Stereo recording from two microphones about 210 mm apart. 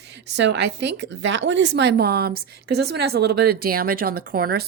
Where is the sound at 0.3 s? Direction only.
55° right (ahead or behind).